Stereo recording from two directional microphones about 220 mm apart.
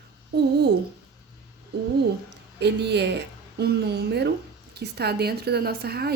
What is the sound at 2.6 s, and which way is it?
A woman's voice, 50° right (ahead or behind).